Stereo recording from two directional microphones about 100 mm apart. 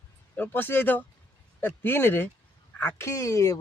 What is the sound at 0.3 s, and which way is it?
Speech, 20° left (ahead or behind).